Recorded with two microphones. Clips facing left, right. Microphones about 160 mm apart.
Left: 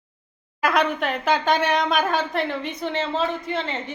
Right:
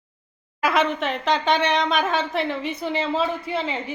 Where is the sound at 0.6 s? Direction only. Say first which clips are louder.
Even; centre (ahead or behind).